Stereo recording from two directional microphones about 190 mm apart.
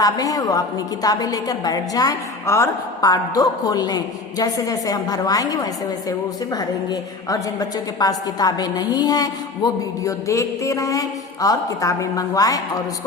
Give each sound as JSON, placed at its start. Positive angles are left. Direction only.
{"t": 0.0, "sound": "a woman's voice", "side_deg": 20}